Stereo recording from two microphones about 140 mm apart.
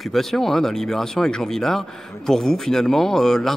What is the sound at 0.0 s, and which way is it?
Speech, centre (ahead or behind).